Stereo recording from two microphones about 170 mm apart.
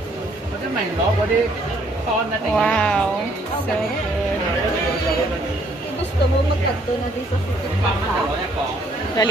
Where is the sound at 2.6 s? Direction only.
5° left (ahead or behind).